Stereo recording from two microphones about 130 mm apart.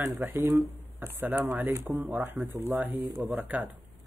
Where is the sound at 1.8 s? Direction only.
Centre (ahead or behind).